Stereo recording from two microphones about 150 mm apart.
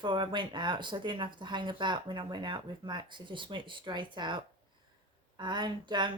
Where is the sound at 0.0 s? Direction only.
30° right (ahead or behind).